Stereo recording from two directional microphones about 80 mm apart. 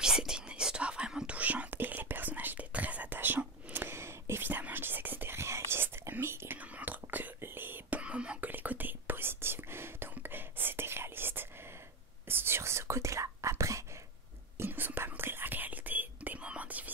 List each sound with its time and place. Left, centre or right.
0.0 s whispering: centre; by 8.0 s right
8.0 s whispering: centre; by 13.8 s right
14.6 s whispering: right